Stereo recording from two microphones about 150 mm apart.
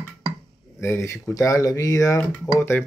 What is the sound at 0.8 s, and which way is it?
Speech, 15° left (ahead or behind).